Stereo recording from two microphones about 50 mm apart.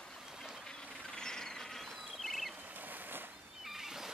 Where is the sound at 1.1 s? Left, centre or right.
Centre.